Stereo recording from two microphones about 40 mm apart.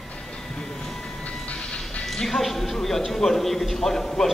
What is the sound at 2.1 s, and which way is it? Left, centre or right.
A man's voice, centre.